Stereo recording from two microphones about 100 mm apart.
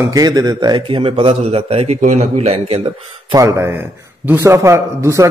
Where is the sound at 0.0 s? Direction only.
35° right (ahead or behind); by 2.9 s 85° right.